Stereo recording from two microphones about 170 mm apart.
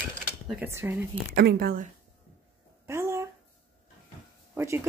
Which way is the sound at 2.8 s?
15° right (ahead or behind).